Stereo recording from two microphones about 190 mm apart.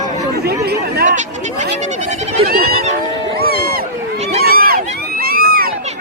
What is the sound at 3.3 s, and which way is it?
Music, 55° right (ahead or behind).